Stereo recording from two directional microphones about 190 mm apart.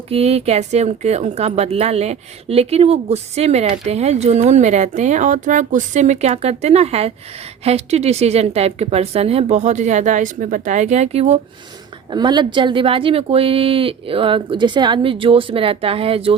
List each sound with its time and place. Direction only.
0.1 s speech: 35° right (ahead or behind)
12.1 s speech: 25° right (ahead or behind)